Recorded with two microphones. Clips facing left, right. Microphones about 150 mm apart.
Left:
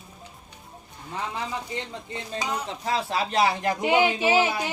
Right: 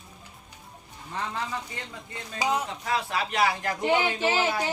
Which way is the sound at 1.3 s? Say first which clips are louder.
Left 2 dB; 25° left (ahead or behind).